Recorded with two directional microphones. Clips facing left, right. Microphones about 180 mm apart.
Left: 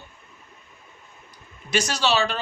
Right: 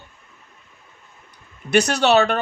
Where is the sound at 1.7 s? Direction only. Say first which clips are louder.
Right 7 dB; 60° right (ahead or behind).